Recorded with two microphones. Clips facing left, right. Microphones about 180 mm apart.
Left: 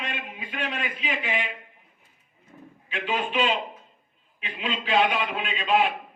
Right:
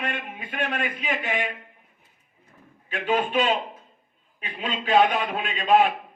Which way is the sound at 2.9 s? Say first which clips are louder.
Right 4 dB; 45° right (ahead or behind).